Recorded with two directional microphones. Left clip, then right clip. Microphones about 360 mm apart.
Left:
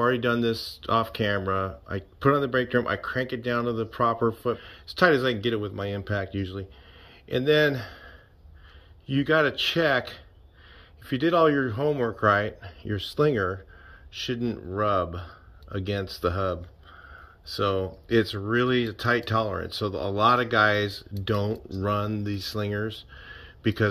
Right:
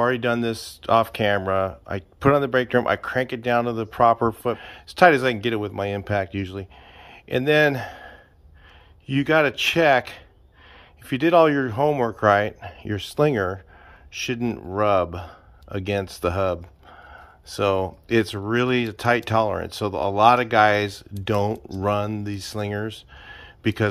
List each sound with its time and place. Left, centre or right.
0.0 s speech: centre
7.1 s a sound: centre
9.0 s speech: centre